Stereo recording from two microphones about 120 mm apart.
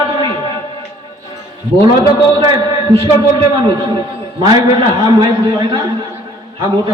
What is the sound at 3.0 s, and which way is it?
A man's voice, 40° right (ahead or behind).